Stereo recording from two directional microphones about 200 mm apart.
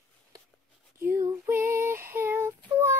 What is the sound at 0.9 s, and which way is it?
Female singing, 10° right (ahead or behind).